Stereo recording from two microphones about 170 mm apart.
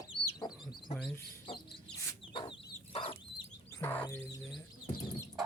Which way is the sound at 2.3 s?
30° left (ahead or behind).